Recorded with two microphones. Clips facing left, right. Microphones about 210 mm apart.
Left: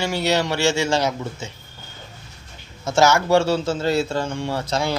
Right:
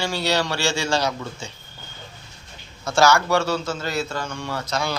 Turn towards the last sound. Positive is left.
turn(degrees=25)  # may be behind; listen again after turning